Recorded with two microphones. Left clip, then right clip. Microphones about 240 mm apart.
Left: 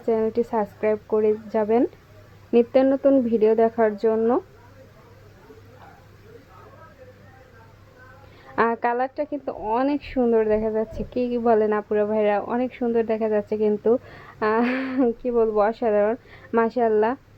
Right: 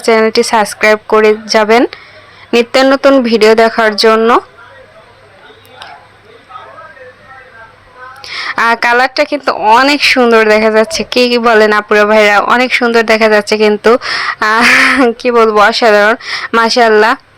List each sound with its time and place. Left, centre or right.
0.1 s speech: centre
4.2 s speech: right
8.4 s speech: centre
15.4 s speech: right
15.6 s speech: centre